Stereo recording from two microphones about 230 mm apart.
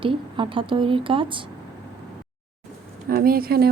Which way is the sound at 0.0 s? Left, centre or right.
Right.